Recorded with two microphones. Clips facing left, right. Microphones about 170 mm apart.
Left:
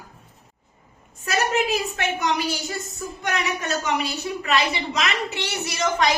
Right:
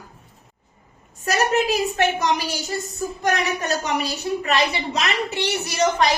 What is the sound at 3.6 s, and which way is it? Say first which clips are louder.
Speech: right 1 dB; 40° right (ahead or behind).